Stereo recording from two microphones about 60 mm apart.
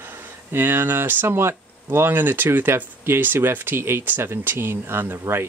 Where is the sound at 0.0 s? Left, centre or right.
Right.